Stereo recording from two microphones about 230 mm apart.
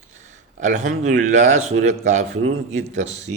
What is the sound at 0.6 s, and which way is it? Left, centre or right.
Speech, right.